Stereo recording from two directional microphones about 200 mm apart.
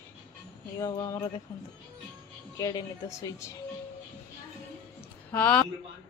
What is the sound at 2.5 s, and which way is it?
Speech, 20° left (ahead or behind).